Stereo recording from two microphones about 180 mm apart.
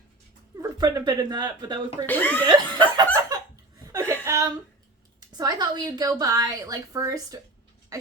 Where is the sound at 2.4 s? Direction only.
25° right (ahead or behind).